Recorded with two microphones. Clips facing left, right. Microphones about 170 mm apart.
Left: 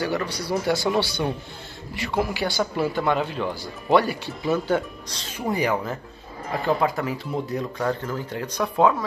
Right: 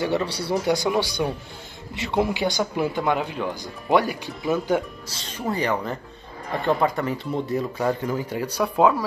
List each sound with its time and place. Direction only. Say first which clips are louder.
0.0 s speech: right 2 dB; 25° right (ahead or behind); by 5.3 s 5° right (ahead or behind)
5.5 s speech: left 1 dB; 10° left (ahead or behind); by 9.0 s 10° right (ahead or behind)